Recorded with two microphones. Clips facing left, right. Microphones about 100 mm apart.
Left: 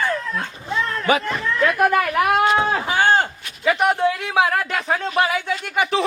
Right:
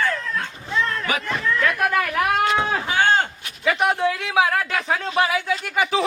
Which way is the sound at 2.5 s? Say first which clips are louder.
Left 2 dB; 10° left (ahead or behind).